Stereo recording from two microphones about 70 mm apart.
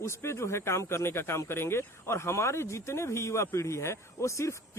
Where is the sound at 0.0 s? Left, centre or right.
Left.